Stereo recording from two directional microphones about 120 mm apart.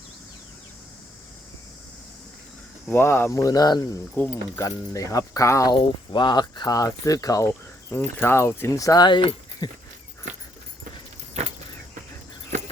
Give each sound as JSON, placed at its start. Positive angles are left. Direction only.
{"t": 2.9, "sound": "speech", "side_deg": 20}
{"t": 4.1, "sound": "speech", "side_deg": 15}
{"t": 5.7, "sound": "speech", "side_deg": 40}